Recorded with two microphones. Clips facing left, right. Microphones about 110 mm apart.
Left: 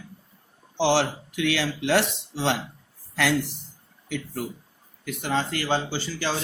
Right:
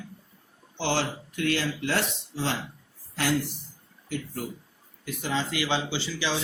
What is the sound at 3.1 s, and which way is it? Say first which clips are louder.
Speech: left 3 dB; 80° left.